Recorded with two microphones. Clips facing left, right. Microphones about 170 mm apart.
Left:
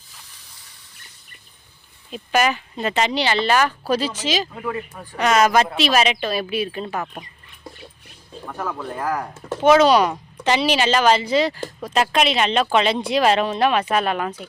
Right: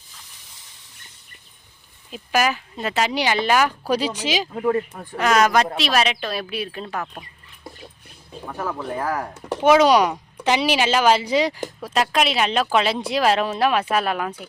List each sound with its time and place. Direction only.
2.0 s speech: 5° right (ahead or behind)
4.5 s speech: 35° right (ahead or behind)
5.1 s speech: centre (ahead or behind)
8.3 s a sound: 5° right (ahead or behind)
8.8 s speech: 10° right (ahead or behind)